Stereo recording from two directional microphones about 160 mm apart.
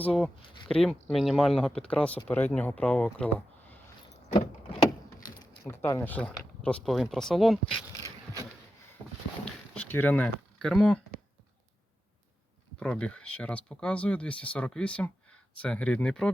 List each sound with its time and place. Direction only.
0.0 s speech: 5° left (ahead or behind)
0.4 s a sound: 30° left (ahead or behind)
0.7 s speech: 5° left (ahead or behind)
5.4 s speech: 15° left (ahead or behind)
8.0 s scrape: 20° right (ahead or behind)
9.4 s speech: 10° left (ahead or behind)
12.8 s speech: 5° left (ahead or behind)